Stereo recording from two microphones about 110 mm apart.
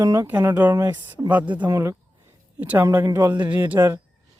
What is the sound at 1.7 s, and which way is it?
Speech, 25° right (ahead or behind).